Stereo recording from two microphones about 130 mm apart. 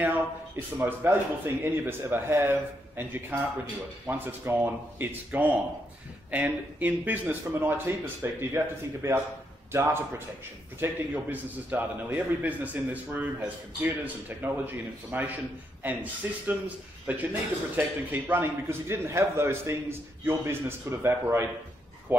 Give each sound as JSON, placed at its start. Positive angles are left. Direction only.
{"t": 0.7, "sound": "a man's voice", "side_deg": -15}